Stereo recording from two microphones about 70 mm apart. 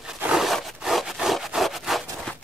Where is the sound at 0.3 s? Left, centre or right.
Centre.